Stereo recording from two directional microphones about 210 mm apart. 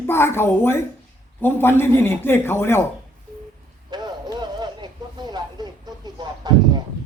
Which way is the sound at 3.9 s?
20° right (ahead or behind).